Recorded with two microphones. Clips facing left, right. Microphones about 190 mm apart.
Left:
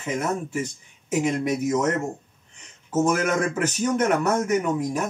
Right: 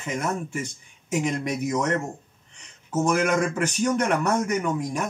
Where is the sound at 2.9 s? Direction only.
5° left (ahead or behind).